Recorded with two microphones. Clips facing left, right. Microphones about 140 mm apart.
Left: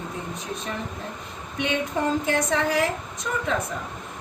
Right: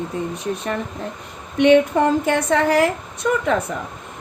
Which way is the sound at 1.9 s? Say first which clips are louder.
Right 6 dB; 70° right (ahead or behind).